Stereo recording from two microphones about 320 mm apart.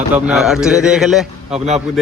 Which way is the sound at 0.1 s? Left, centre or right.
Centre.